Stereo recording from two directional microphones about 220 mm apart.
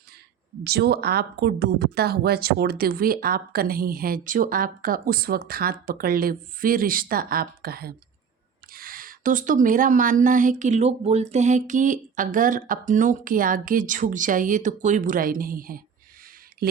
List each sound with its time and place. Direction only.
0.6 s a woman's voice: 45° right (ahead or behind)